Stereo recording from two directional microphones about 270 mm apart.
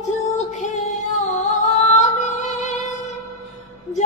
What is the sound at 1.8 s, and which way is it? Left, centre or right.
Music, left.